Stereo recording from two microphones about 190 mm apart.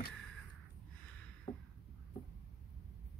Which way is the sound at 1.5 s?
35° left (ahead or behind).